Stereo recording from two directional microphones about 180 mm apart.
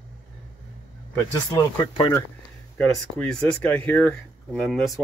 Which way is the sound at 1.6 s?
20° left (ahead or behind).